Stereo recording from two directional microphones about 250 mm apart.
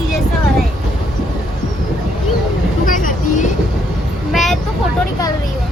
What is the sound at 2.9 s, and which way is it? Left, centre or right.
Vehicle, left.